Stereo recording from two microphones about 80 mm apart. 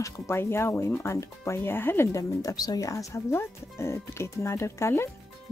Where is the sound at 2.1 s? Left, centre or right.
Left.